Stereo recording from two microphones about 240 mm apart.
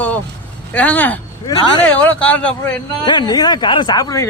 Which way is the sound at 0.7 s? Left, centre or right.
Centre.